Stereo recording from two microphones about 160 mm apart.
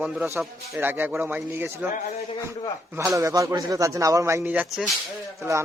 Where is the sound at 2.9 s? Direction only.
20° right (ahead or behind); by 4.9 s centre (ahead or behind).